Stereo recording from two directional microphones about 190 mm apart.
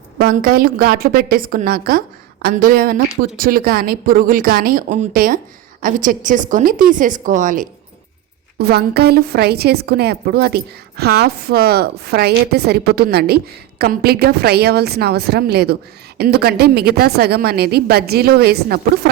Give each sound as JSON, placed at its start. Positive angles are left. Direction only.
{"t": 0.2, "sound": "a woman's voice", "side_deg": -50}
{"t": 8.5, "sound": "a woman's voice", "side_deg": -55}